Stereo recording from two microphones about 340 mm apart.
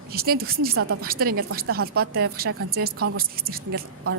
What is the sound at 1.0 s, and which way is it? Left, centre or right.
Speech, right.